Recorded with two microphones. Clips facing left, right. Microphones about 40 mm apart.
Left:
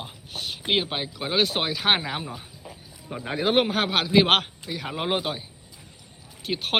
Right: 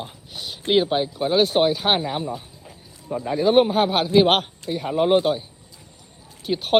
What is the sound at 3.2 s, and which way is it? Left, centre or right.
Speech, left.